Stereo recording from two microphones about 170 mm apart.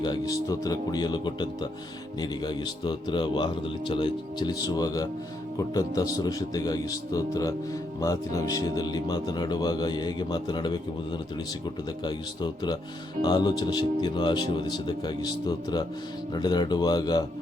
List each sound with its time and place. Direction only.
0.0 s speech: 25° left (ahead or behind)